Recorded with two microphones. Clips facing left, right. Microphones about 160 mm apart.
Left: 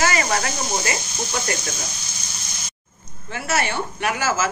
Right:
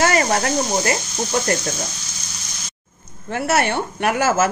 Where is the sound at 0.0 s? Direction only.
45° right (ahead or behind).